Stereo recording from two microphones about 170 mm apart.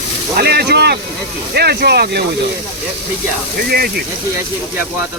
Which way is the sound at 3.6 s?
65° right (ahead or behind).